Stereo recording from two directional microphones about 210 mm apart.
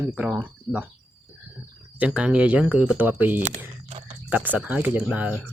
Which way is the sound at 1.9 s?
5° right (ahead or behind).